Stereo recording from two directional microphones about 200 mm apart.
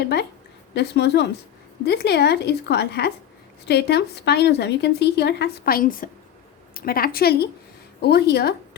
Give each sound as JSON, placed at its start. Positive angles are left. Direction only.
{"t": 0.7, "sound": "a woman's voice", "side_deg": 55}